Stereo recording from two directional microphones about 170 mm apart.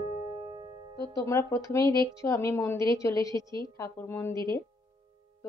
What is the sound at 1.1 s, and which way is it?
A woman's voice, 20° left (ahead or behind).